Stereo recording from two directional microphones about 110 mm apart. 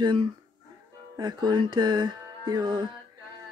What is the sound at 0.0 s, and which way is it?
Speech, 45° right (ahead or behind).